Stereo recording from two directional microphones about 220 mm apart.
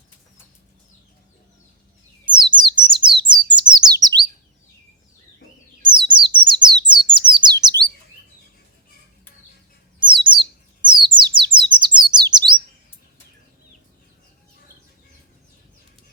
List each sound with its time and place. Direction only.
2.2 s bird: 20° right (ahead or behind)
3.5 s chirp: 20° right (ahead or behind)
5.8 s bird: 20° right (ahead or behind)
7.6 s chirp: 20° right (ahead or behind)
10.0 s bird: 20° right (ahead or behind)
11.9 s chirp: 20° right (ahead or behind)